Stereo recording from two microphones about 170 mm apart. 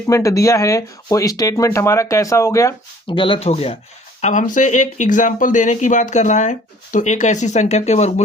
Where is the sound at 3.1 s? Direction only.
30° left (ahead or behind).